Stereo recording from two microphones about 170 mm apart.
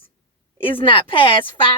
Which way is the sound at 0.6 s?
30° left (ahead or behind).